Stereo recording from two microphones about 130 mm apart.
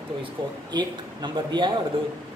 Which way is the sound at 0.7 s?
35° right (ahead or behind).